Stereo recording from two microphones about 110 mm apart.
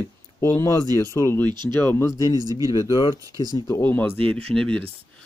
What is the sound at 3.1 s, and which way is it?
Speech, 35° right (ahead or behind).